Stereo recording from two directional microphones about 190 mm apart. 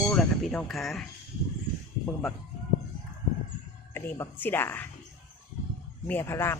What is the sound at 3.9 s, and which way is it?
Speech, 10° left (ahead or behind).